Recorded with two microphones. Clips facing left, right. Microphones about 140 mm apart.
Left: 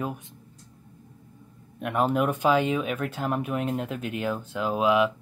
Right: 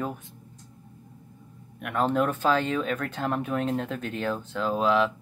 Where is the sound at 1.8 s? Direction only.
15° left (ahead or behind).